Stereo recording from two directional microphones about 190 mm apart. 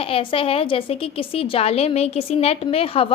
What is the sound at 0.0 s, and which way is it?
A woman's voice, 30° left (ahead or behind).